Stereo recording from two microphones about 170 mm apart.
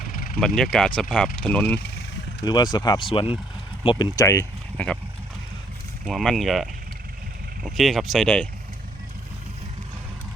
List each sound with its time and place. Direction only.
0.0 s vehicle: 55° left (ahead or behind)
0.3 s speech: 5° left (ahead or behind)
1.6 s speech: 75° left (ahead or behind)
2.4 s speech: 25° left (ahead or behind)
6.1 s speech: centre (ahead or behind)